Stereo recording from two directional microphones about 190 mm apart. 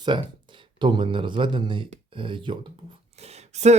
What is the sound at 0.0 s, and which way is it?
Speech, 25° right (ahead or behind).